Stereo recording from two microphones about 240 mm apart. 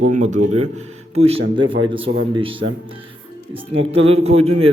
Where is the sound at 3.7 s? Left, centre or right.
Right.